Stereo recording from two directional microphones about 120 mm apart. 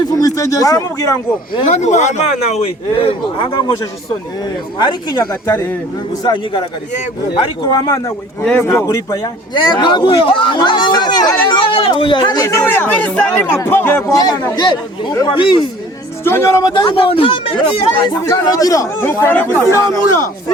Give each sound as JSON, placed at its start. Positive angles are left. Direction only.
{"t": 0.0, "sound": "speech", "side_deg": 30}
{"t": 1.6, "sound": "speech", "side_deg": 75}
{"t": 4.8, "sound": "speech", "side_deg": 40}
{"t": 7.7, "sound": "speech", "side_deg": 30}
{"t": 8.4, "sound": "speech", "side_deg": 15}
{"t": 9.6, "sound": "speech", "side_deg": 40}
{"t": 14.5, "sound": "speech", "side_deg": 40}
{"t": 16.2, "sound": "speech", "side_deg": 20}
{"t": 16.7, "sound": "speech", "side_deg": 45}
{"t": 18.4, "sound": "speech", "side_deg": 30}